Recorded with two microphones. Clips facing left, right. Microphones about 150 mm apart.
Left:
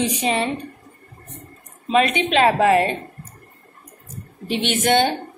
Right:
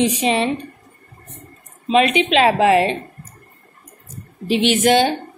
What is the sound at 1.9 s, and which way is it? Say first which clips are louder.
A woman's voice: right 3 dB; 20° right (ahead or behind).